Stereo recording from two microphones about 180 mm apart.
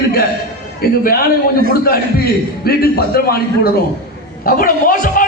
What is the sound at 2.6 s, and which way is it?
A man's voice, 55° left (ahead or behind).